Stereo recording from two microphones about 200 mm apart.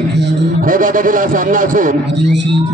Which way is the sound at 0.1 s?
60° right (ahead or behind).